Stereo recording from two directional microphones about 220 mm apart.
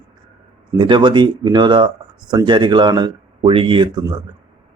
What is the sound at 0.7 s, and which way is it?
Speech, 20° right (ahead or behind).